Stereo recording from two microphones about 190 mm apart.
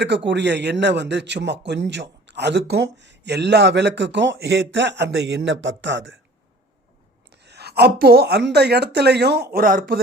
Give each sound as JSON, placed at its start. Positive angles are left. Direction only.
{"t": 0.3, "sound": "a man's voice", "side_deg": -65}
{"t": 7.4, "sound": "a man's voice", "side_deg": -60}